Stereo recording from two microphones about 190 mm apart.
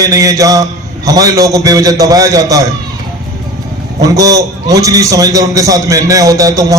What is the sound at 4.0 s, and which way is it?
A man's voice, 20° right (ahead or behind).